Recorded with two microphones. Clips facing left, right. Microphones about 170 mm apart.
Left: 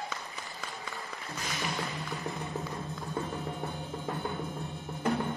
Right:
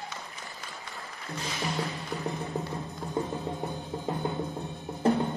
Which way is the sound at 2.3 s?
20° right (ahead or behind).